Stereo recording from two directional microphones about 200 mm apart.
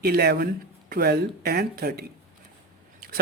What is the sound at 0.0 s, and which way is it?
A man's voice, 50° right (ahead or behind).